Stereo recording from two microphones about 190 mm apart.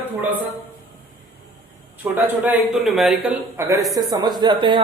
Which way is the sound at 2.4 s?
5° right (ahead or behind).